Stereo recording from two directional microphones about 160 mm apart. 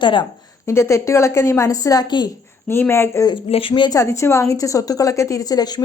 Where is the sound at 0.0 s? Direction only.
30° left (ahead or behind).